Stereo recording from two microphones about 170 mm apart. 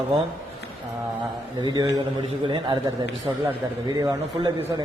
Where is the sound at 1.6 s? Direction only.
25° right (ahead or behind).